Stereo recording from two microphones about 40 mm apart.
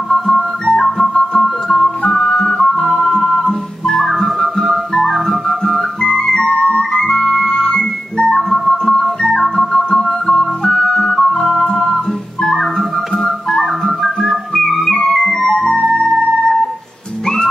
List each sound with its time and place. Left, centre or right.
0.1 s music: centre
1.4 s music: centre
2.0 s music: centre
5.9 s music: centre